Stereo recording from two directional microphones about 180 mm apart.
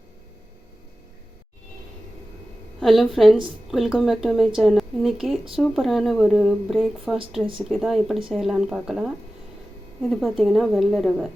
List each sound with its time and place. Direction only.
2.8 s speech: centre (ahead or behind)